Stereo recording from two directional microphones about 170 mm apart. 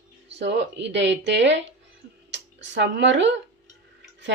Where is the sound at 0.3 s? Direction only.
90° right.